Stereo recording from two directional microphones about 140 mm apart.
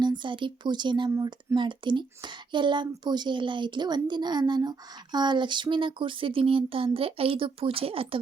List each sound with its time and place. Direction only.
0.0 s speech: 35° right (ahead or behind)
1.1 s speech: 20° right (ahead or behind)
1.5 s speech: 35° right (ahead or behind)